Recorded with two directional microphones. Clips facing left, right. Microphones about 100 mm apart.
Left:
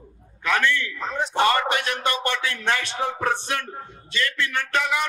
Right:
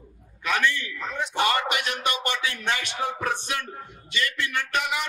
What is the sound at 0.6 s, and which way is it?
Speech, 20° right (ahead or behind).